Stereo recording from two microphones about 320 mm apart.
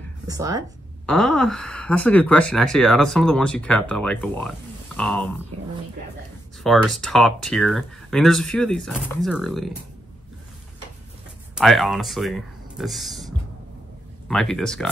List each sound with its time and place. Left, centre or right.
0.3 s speech: centre
1.0 s speech: centre
5.5 s a sound: right
6.6 s speech: centre
11.5 s speech: centre